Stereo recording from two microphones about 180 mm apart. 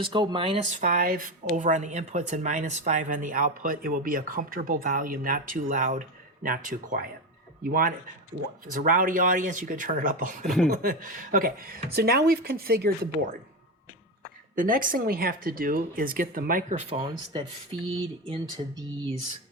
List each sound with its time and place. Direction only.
0.0 s speech: 25° right (ahead or behind)
0.8 s speech: 45° right (ahead or behind)
14.5 s speech: 50° right (ahead or behind)
16.7 s speech: 30° right (ahead or behind)